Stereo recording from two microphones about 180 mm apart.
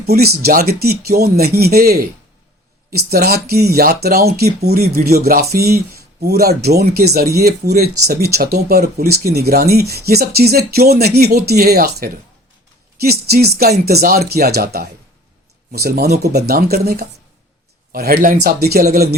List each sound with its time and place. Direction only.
0.0 s speech: 60° right (ahead or behind)